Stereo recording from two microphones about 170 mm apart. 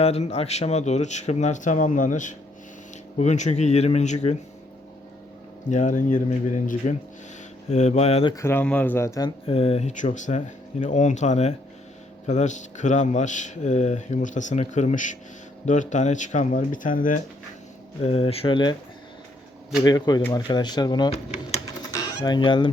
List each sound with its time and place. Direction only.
0.0 s speech: 40° left (ahead or behind)
5.6 s speech: 45° left (ahead or behind)
8.3 s speech: 15° left (ahead or behind)
9.5 s speech: 35° left (ahead or behind)
18.0 s speech: 35° left (ahead or behind)
19.8 s speech: 25° left (ahead or behind)
21.1 s speech: 40° left (ahead or behind)
22.2 s speech: 25° left (ahead or behind)